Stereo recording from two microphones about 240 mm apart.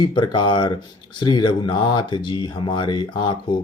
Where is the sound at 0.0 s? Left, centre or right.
Centre.